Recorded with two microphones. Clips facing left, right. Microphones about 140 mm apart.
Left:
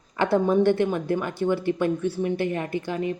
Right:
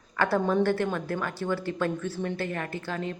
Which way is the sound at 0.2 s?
20° left (ahead or behind).